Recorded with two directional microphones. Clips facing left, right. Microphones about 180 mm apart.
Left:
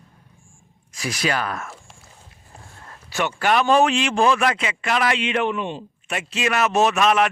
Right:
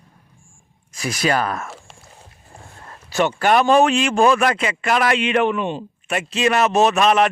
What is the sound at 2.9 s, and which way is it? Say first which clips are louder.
A man's voice: right 5 dB; 40° right (ahead or behind).